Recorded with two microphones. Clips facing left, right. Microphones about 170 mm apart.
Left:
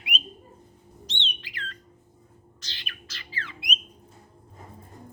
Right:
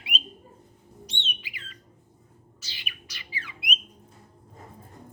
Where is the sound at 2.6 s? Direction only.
10° right (ahead or behind).